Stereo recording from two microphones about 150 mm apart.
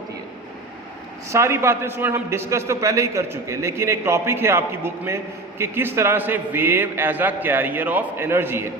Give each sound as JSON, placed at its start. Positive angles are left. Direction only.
{"t": 1.3, "sound": "a man's voice", "side_deg": -20}